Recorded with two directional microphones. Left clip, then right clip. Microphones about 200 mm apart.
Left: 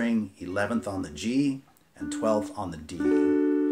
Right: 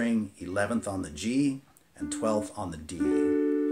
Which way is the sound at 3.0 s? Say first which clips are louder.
Left 2 dB; 20° left (ahead or behind).